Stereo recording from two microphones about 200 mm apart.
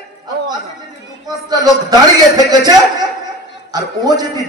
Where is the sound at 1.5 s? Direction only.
20° right (ahead or behind).